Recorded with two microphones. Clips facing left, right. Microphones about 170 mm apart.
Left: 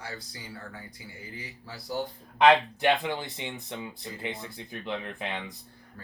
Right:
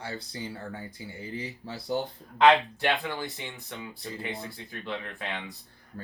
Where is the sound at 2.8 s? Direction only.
20° left (ahead or behind).